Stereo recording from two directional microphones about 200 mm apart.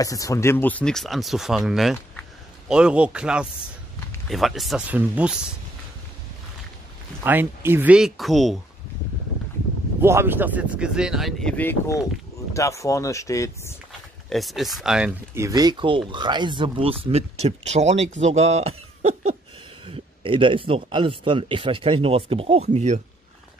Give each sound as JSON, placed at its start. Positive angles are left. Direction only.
{"t": 0.0, "sound": "speech", "side_deg": 15}
{"t": 7.2, "sound": "speech", "side_deg": -10}
{"t": 10.0, "sound": "speech", "side_deg": -10}
{"t": 14.3, "sound": "speech", "side_deg": 0}
{"t": 15.4, "sound": "speech", "side_deg": -20}